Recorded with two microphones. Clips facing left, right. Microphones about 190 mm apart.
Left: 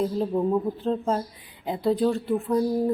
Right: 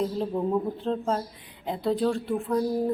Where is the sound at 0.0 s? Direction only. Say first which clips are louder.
Left 3 dB; 5° left (ahead or behind).